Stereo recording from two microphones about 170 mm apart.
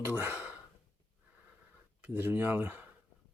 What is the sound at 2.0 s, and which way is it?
Speech, 10° right (ahead or behind).